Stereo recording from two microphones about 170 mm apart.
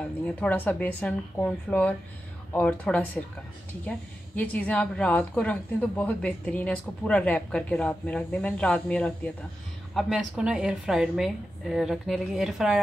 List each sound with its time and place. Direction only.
0.4 s a woman's voice: 10° left (ahead or behind)
4.4 s a woman's voice: 10° left (ahead or behind)